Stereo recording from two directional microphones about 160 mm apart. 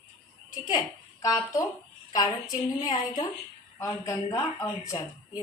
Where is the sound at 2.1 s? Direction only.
25° left (ahead or behind).